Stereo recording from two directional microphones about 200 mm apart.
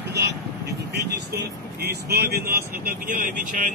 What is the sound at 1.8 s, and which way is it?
Speech, 50° right (ahead or behind).